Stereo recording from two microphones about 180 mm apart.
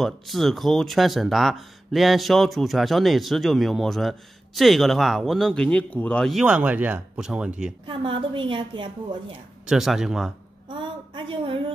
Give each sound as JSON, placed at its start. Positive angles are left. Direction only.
{"t": 0.0, "sound": "speech", "side_deg": 0}
{"t": 7.8, "sound": "a woman's voice", "side_deg": -25}
{"t": 9.7, "sound": "speech", "side_deg": 0}
{"t": 10.7, "sound": "a sound", "side_deg": -25}